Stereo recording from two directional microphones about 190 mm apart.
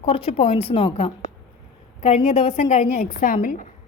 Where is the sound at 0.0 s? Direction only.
30° left (ahead or behind).